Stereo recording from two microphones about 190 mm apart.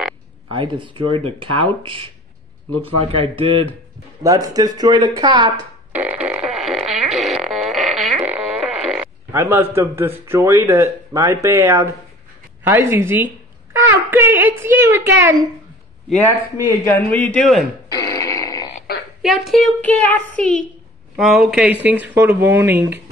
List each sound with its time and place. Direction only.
0.5 s speech: 25° right (ahead or behind)
3.1 s speech: 30° right (ahead or behind)
4.2 s speech: 20° right (ahead or behind)
5.9 s fart: 5° right (ahead or behind)
9.3 s speech: 10° right (ahead or behind)
13.7 s a sound: 10° right (ahead or behind)
14.6 s speech: 15° right (ahead or behind)
16.8 s a man's voice: 10° left (ahead or behind)
17.8 s a sound: 20° left (ahead or behind)
18.9 s frog: 55° left (ahead or behind)
19.2 s a woman's voice: centre (ahead or behind)